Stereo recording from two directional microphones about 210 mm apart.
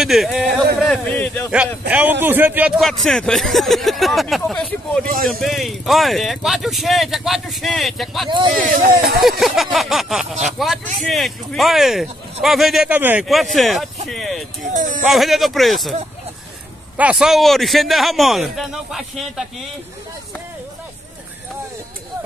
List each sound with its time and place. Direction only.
0.0 s a man's voice: centre (ahead or behind)
1.9 s a man's voice: 10° right (ahead or behind)
8.3 s speech: 20° right (ahead or behind)
8.6 s speech: 40° right (ahead or behind)
9.4 s a man's voice: centre (ahead or behind)
14.7 s speech: 35° right (ahead or behind)
15.0 s a man's voice: centre (ahead or behind)
16.9 s a man's voice: 5° right (ahead or behind)